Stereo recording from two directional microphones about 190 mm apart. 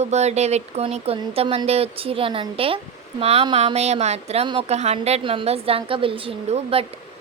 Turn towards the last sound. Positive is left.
turn(degrees=-30)  # may be behind; listen again after turning